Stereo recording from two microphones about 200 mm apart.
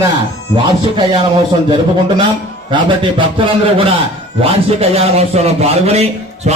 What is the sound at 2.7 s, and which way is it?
A man's voice, 25° right (ahead or behind).